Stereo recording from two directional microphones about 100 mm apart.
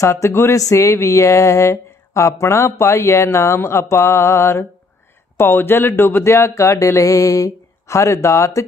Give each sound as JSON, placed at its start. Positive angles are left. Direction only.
{"t": 0.0, "sound": "speech", "side_deg": 30}